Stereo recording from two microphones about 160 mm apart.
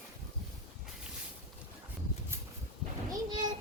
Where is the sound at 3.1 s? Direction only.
25° right (ahead or behind).